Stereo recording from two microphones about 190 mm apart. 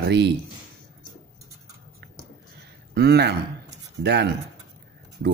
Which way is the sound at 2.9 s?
60° right (ahead or behind).